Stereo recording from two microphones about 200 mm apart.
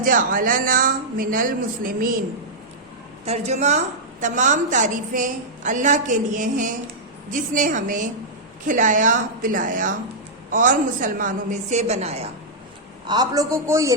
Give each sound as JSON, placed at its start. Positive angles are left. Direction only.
{"t": 0.0, "sound": "speech", "side_deg": -45}
{"t": 3.2, "sound": "a woman's voice", "side_deg": -30}
{"t": 13.1, "sound": "a man's voice", "side_deg": -20}